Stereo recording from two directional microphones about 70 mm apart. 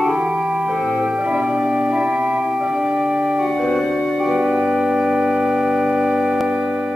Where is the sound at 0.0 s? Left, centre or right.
Centre.